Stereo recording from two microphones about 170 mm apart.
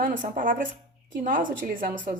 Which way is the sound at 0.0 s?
50° right (ahead or behind).